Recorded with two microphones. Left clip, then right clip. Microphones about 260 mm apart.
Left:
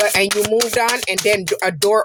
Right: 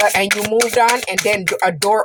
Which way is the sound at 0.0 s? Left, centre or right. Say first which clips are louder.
Right 1 dB; left.